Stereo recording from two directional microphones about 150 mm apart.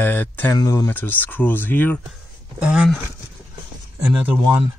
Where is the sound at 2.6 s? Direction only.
5° right (ahead or behind).